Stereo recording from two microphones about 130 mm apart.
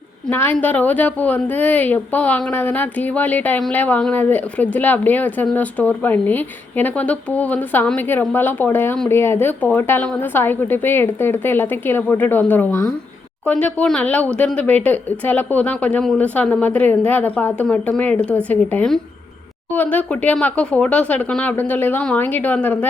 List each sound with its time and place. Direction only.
0.3 s a woman's voice: 15° left (ahead or behind)